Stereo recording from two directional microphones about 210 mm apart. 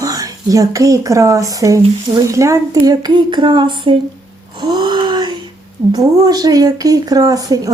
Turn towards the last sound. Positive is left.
turn(degrees=-15)  # may be behind; listen again after turning